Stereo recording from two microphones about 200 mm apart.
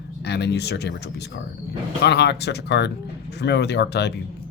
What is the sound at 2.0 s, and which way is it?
Speech, 55° left (ahead or behind).